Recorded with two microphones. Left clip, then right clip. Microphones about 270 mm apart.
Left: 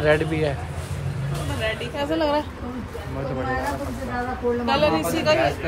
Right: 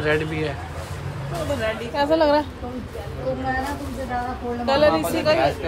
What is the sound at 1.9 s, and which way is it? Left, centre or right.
Speech, right.